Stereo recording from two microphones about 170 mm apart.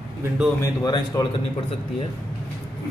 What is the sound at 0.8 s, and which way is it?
Speech, 25° left (ahead or behind).